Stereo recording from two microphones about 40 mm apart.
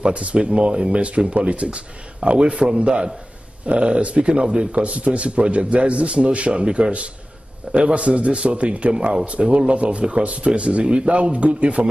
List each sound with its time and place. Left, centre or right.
0.0 s a man's voice: right